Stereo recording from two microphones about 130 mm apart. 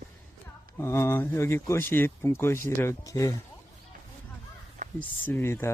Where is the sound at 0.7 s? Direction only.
20° left (ahead or behind).